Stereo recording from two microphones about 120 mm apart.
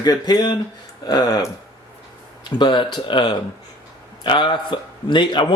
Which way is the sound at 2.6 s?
40° left (ahead or behind).